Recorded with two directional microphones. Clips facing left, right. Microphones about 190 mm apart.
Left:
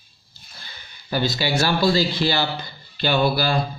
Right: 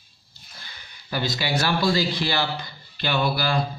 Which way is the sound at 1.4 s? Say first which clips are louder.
Left 2 dB; 30° left (ahead or behind).